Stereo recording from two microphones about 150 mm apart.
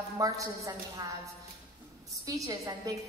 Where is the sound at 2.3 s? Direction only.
20° right (ahead or behind).